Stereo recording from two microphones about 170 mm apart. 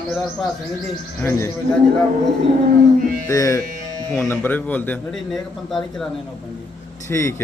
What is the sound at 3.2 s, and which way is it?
Music, 20° left (ahead or behind).